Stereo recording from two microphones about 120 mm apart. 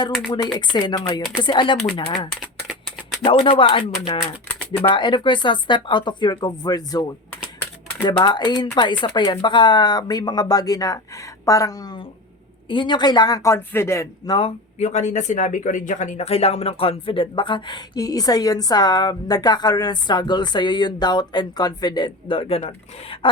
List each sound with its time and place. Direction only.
0.3 s speech: 35° left (ahead or behind)
2.3 s a sound: centre (ahead or behind)
3.2 s speech: 45° left (ahead or behind)
8.0 s speech: 40° left (ahead or behind)
12.6 s speech: 40° left (ahead or behind); by 14.3 s 25° left (ahead or behind)
14.8 s speech: 70° left (ahead or behind); by 23.3 s 50° left (ahead or behind)